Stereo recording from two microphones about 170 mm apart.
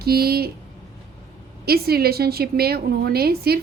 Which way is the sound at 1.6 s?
65° right (ahead or behind).